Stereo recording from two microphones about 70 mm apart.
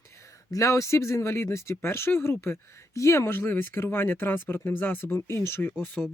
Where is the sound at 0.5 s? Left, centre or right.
Left.